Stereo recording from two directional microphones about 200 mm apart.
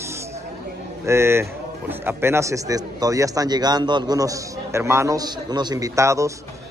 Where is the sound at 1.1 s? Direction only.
15° right (ahead or behind).